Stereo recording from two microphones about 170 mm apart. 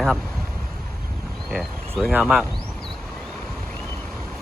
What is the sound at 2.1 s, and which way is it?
Speech, 10° right (ahead or behind).